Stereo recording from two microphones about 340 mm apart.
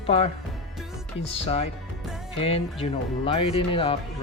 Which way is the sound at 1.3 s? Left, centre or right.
Centre.